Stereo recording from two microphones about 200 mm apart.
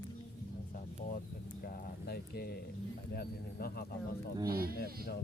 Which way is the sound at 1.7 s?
50° left (ahead or behind).